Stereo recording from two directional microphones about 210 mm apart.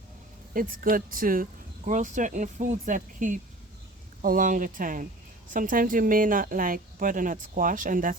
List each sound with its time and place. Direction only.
0.5 s speech: 40° right (ahead or behind)